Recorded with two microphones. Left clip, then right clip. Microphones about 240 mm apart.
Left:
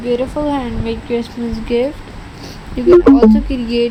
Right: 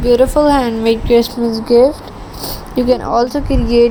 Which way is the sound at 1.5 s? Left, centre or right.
Right.